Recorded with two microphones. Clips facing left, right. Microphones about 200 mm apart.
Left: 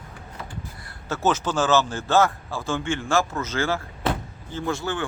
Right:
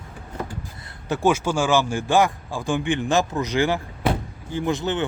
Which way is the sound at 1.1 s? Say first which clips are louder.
Right 3 dB; 10° right (ahead or behind).